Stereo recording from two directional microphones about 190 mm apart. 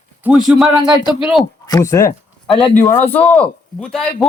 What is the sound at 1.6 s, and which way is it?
Speech, 20° left (ahead or behind).